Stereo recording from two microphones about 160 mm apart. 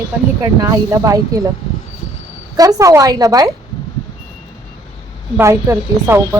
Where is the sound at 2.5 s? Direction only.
25° right (ahead or behind).